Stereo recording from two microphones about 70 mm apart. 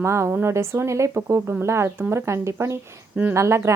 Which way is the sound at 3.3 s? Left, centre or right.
Right.